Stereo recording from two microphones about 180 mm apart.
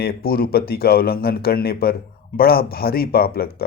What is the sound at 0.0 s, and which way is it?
Speech, 55° left (ahead or behind).